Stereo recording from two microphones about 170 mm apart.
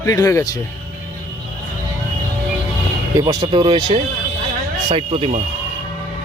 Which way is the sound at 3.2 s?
25° right (ahead or behind).